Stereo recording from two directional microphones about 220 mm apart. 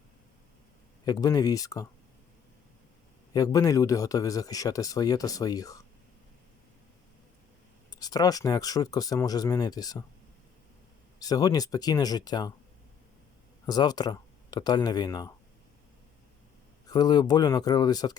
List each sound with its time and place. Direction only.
1.0 s speech: 15° left (ahead or behind)
3.3 s speech: 15° left (ahead or behind)
7.9 s speech: 15° left (ahead or behind)
11.2 s speech: 15° left (ahead or behind)
13.7 s speech: 20° left (ahead or behind)
16.9 s speech: 20° left (ahead or behind)